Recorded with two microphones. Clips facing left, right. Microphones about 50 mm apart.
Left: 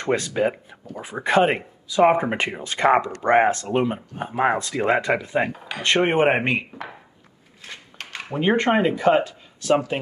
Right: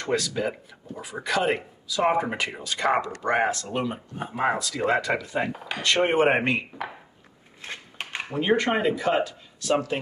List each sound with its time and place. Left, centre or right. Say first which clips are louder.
0.0 s speech: left 4 dB; left; by 6.6 s centre
7.6 s a sound: right 2 dB; right
8.3 s speech: left 3 dB; left